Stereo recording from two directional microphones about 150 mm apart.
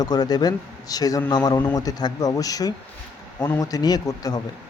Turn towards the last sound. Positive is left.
turn(degrees=25)  # may be behind; listen again after turning